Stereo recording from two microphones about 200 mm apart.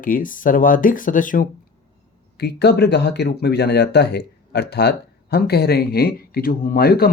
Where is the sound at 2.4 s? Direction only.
55° left (ahead or behind).